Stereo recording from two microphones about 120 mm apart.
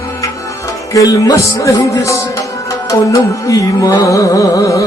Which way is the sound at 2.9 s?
30° left (ahead or behind).